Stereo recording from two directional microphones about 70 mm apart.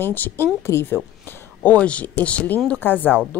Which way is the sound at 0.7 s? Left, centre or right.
Left.